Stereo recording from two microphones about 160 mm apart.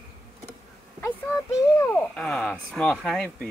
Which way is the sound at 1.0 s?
15° left (ahead or behind).